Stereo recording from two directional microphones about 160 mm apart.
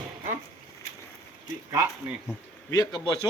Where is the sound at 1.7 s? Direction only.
15° right (ahead or behind).